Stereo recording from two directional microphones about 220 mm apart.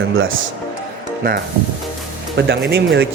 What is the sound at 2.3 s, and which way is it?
Speech, 50° right (ahead or behind).